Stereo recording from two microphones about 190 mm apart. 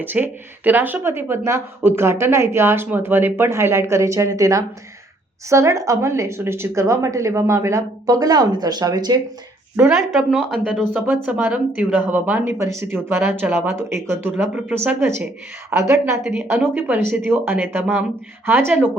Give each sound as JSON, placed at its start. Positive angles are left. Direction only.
{"t": 0.0, "sound": "speech", "side_deg": -10}
{"t": 9.7, "sound": "a woman's voice", "side_deg": -5}